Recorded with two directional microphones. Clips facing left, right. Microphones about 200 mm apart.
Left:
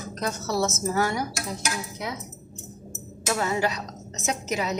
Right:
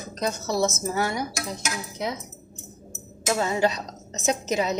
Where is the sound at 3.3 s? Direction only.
25° right (ahead or behind).